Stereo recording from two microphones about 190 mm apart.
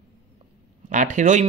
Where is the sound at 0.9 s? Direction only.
40° right (ahead or behind).